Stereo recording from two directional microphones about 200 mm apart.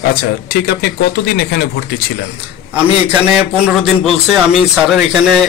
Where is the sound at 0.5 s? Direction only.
50° left (ahead or behind).